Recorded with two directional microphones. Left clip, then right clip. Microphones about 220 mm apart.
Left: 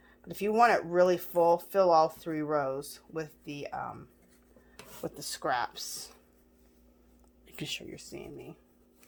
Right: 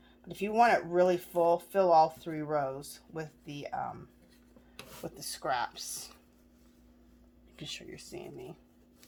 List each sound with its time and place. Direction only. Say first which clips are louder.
0.3 s speech: left 1 dB; 35° left (ahead or behind)
5.0 s speech: left 2 dB; 35° left (ahead or behind)
7.5 s speech: left 4 dB; 45° left (ahead or behind)